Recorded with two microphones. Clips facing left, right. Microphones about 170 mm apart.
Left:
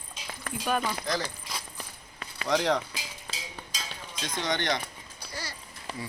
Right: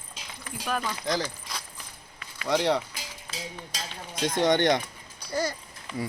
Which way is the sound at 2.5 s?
10° right (ahead or behind).